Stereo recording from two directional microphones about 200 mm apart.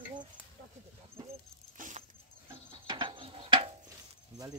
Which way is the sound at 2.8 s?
25° right (ahead or behind).